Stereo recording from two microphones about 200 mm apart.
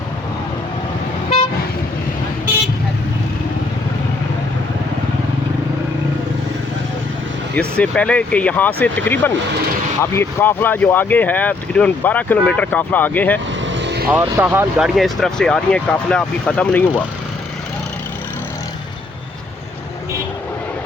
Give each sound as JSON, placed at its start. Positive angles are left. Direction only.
{"t": 7.5, "sound": "speech", "side_deg": 5}
{"t": 13.7, "sound": "vehicle", "side_deg": -60}
{"t": 14.1, "sound": "speech", "side_deg": -10}